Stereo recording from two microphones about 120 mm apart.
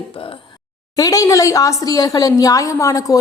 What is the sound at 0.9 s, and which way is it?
A woman's voice, 30° left (ahead or behind).